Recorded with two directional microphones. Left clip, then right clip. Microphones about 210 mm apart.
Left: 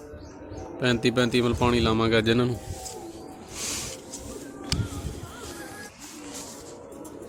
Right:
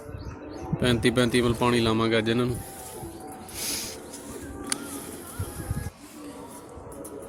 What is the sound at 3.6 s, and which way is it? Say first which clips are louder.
Snake: even; 5° left (ahead or behind).